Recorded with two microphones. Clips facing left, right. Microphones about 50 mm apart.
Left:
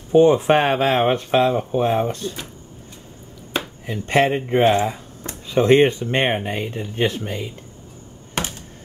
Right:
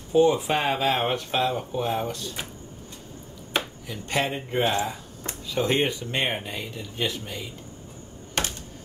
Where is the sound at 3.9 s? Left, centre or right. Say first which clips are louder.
Left 9 dB; left.